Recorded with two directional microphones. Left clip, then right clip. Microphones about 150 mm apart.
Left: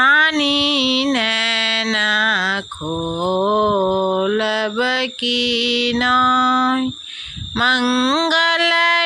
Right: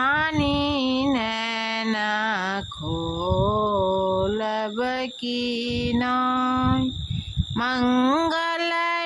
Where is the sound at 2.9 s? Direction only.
15° left (ahead or behind).